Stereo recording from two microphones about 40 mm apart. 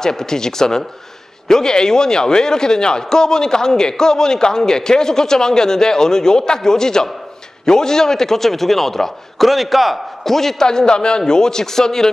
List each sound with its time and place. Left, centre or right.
0.0 s a man's voice: centre